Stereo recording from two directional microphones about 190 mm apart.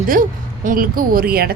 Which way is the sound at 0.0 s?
45° right (ahead or behind).